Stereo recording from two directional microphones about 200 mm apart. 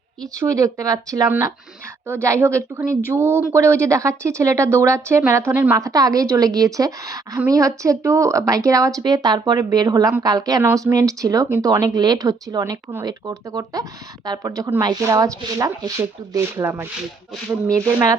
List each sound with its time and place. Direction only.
0.3 s speech: 15° right (ahead or behind)